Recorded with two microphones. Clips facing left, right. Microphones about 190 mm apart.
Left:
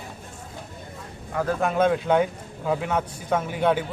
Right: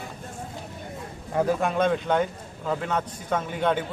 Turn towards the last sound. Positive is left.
turn(degrees=10)  # may be behind; listen again after turning